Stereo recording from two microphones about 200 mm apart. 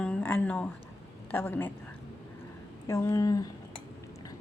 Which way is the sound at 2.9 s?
15° left (ahead or behind).